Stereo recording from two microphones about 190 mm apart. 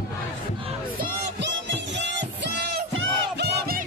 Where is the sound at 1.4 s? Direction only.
65° right (ahead or behind).